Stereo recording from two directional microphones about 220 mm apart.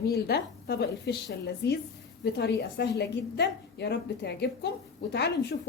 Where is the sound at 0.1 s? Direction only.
45° left (ahead or behind).